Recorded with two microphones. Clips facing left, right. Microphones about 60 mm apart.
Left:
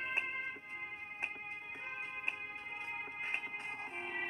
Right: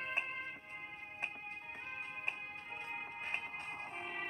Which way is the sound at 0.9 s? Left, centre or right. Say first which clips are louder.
Left 2 dB; left.